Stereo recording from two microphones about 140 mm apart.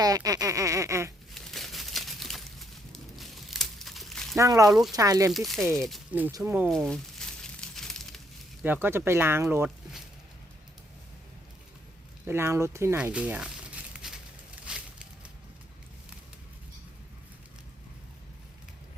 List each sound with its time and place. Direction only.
0.0 s a sound: 25° right (ahead or behind)
1.3 s a sound: centre (ahead or behind)
3.2 s crumpling: centre (ahead or behind)
4.4 s speech: 25° right (ahead or behind)
4.7 s speech: centre (ahead or behind)
4.9 s speech: 25° right (ahead or behind)
5.3 s speech: centre (ahead or behind)
6.3 s speech: 15° right (ahead or behind)
6.7 s crumpling: 5° left (ahead or behind)
8.6 s speech: 15° right (ahead or behind)
12.2 s speech: 15° right (ahead or behind)
13.0 s crumpling: 10° right (ahead or behind)